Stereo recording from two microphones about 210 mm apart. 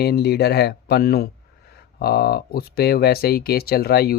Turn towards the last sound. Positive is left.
turn(degrees=45)  # may be behind; listen again after turning